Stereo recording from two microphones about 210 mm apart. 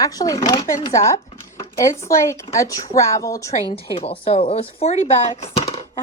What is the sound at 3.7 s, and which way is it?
Speech, 25° left (ahead or behind).